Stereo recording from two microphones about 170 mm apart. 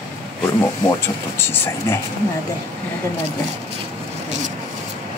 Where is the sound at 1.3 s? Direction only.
15° left (ahead or behind).